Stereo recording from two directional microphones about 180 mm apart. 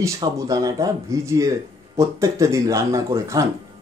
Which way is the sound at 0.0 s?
20° right (ahead or behind).